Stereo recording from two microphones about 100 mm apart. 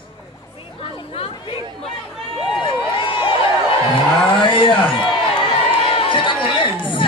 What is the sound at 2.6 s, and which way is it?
Run, 60° left (ahead or behind).